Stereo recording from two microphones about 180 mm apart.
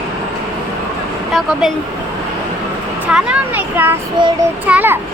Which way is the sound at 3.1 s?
10° right (ahead or behind).